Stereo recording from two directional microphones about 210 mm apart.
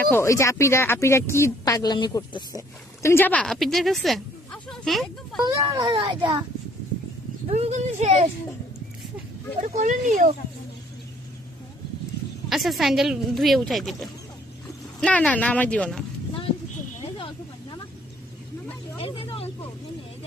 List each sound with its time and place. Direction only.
0.1 s speech: 15° left (ahead or behind)
5.4 s a child's voice: 15° right (ahead or behind)
7.4 s speech: 30° right (ahead or behind)
9.6 s speech: 35° right (ahead or behind)
12.5 s speech: centre (ahead or behind)
17.2 s snake: 25° left (ahead or behind)
18.9 s a sound: 25° left (ahead or behind)